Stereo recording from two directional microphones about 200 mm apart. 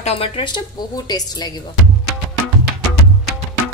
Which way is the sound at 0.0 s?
30° left (ahead or behind).